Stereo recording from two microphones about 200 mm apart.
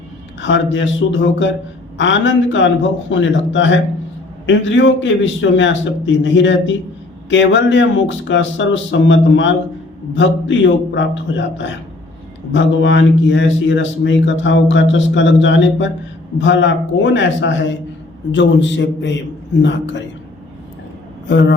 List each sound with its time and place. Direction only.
0.4 s a man's voice: 65° left (ahead or behind)